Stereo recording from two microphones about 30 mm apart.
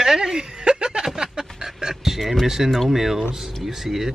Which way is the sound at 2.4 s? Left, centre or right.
Centre.